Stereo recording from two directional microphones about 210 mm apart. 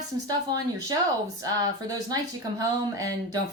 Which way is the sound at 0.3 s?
20° right (ahead or behind).